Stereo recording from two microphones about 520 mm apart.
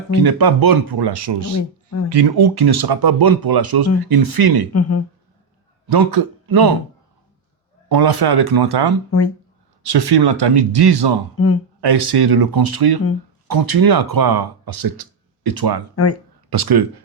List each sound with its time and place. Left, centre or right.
0.2 s speech: right
1.5 s speech: left
2.1 s speech: right
4.7 s speech: left
5.9 s speech: right
7.9 s speech: right
9.0 s speech: left
9.9 s speech: right
11.3 s speech: left
11.8 s speech: right